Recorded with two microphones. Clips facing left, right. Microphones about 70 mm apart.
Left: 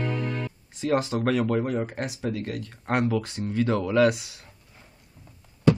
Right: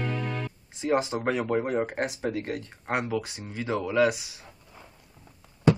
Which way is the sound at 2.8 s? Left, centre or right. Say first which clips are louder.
Left 4 dB; centre.